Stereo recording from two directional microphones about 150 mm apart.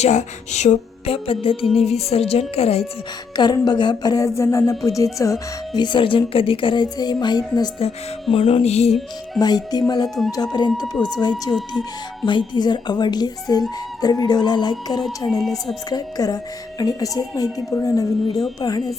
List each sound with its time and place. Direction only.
0.0 s a woman's voice: 50° left (ahead or behind)
3.3 s speech: 30° left (ahead or behind)
7.8 s a woman's voice: 40° left (ahead or behind)
8.9 s music: centre (ahead or behind)
9.4 s speech: 25° left (ahead or behind)
15.3 s music: centre (ahead or behind)
15.9 s speech: 25° left (ahead or behind)